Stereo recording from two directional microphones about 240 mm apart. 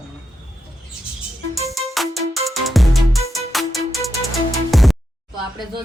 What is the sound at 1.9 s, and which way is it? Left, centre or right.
Music, centre.